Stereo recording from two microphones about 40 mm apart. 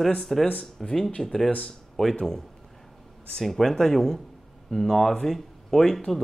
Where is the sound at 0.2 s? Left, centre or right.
Centre.